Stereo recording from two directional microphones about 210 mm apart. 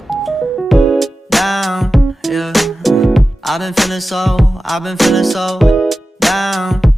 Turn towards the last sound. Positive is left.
turn(degrees=0)  # may be behind; listen again after turning